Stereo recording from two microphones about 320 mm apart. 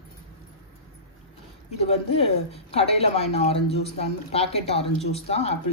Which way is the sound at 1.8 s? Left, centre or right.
Centre.